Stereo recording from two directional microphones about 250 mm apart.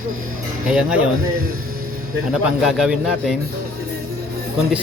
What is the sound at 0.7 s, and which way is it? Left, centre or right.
Speech, centre.